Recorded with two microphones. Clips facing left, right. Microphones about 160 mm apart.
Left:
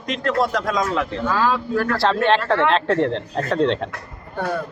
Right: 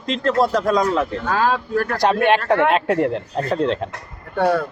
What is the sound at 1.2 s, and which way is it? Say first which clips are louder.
Speech: right 1 dB; 55° right (ahead or behind).